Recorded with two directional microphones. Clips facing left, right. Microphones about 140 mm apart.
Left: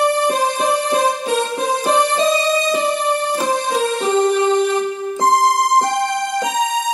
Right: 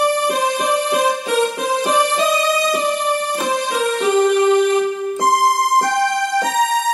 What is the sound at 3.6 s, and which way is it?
Music, 35° left (ahead or behind).